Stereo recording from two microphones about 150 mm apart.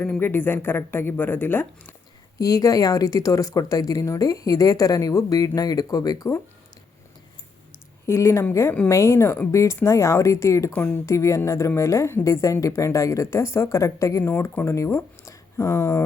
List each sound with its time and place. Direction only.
0.0 s speech: 10° left (ahead or behind)
8.0 s speech: 20° left (ahead or behind)